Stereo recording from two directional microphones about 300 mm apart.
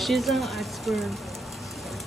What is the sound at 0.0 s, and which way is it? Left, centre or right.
Speech, centre.